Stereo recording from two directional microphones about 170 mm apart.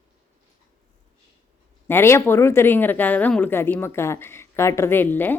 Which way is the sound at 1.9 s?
15° left (ahead or behind).